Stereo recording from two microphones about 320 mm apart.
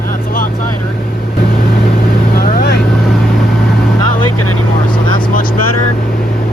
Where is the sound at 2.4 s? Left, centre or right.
Left.